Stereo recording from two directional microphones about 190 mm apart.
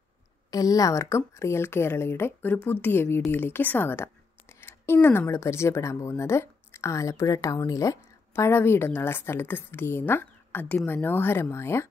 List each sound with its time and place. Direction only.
0.5 s a woman's voice: 20° left (ahead or behind)